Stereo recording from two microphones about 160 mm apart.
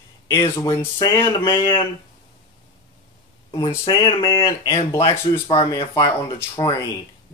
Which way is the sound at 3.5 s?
25° left (ahead or behind).